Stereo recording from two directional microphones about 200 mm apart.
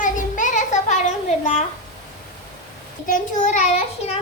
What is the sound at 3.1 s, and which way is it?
A child's voice, 35° left (ahead or behind).